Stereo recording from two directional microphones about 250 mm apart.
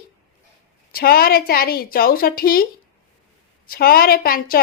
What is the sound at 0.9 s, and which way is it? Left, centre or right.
A woman's voice, left.